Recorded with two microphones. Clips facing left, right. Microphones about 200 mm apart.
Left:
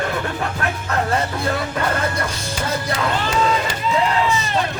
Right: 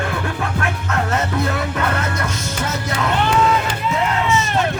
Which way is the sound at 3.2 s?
60° right (ahead or behind).